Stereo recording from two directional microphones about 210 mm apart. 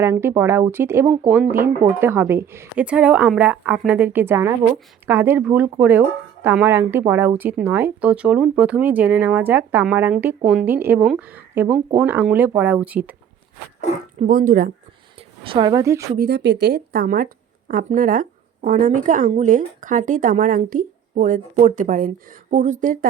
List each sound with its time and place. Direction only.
0.0 s speech: 10° right (ahead or behind)
14.2 s a woman's voice: 40° right (ahead or behind)
15.4 s speech: 20° right (ahead or behind)
16.1 s a woman's voice: 50° right (ahead or behind)